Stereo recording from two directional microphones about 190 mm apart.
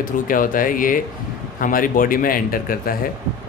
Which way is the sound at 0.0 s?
45° left (ahead or behind).